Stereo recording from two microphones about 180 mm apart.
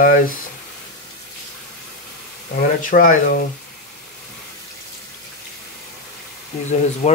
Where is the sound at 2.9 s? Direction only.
50° left (ahead or behind).